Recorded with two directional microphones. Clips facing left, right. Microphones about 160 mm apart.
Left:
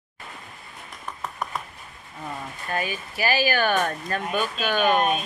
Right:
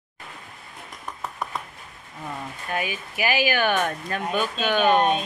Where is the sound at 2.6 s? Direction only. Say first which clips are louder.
Even; 15° right (ahead or behind).